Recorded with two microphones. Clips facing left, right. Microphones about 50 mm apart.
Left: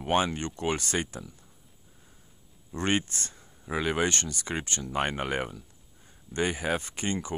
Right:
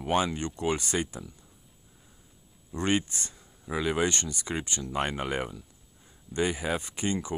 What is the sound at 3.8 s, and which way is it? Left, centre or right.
Speech, left.